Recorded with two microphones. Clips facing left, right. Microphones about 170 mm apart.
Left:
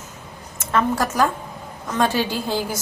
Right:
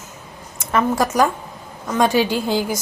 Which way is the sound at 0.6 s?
10° right (ahead or behind).